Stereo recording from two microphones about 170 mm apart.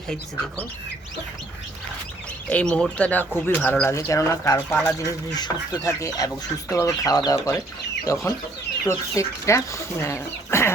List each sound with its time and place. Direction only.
2.5 s speech: 5° left (ahead or behind)